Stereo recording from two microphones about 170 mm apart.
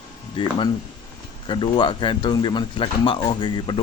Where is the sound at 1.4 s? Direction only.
30° left (ahead or behind).